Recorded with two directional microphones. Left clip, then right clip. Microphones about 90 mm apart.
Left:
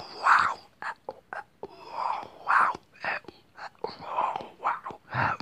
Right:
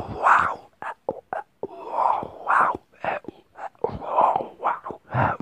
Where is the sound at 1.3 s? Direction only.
45° right (ahead or behind).